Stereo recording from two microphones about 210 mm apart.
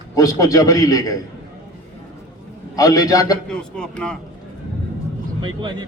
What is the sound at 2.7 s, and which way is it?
Speech, 15° left (ahead or behind).